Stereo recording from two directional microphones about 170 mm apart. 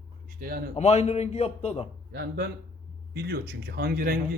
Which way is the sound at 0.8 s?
40° left (ahead or behind).